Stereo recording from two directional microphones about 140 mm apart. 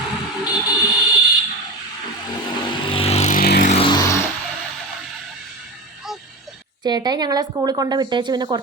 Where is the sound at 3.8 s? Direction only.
35° left (ahead or behind).